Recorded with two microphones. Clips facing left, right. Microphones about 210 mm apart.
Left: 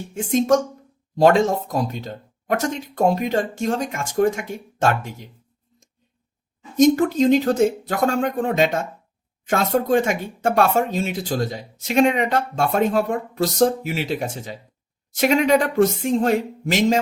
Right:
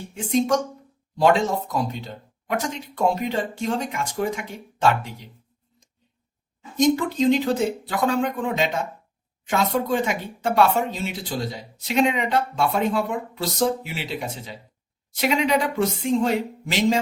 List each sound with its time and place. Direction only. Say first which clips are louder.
0.1 s speech: left 3 dB; 45° left (ahead or behind)
6.7 s speech: left 4 dB; 45° left (ahead or behind)